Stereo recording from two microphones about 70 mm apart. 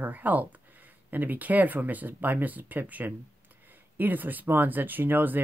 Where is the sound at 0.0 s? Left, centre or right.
Right.